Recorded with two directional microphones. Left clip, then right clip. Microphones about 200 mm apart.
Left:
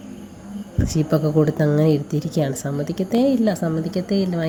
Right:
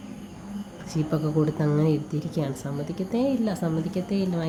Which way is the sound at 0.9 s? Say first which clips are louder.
Left 7 dB; 25° left (ahead or behind).